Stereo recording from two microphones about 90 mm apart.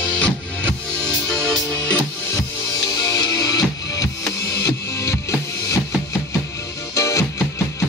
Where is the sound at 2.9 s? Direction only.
45° left (ahead or behind).